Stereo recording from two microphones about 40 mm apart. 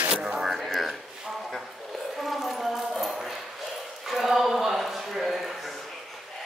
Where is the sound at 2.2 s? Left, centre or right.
Centre.